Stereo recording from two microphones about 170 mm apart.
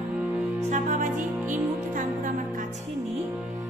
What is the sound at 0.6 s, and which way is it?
Music, 45° right (ahead or behind).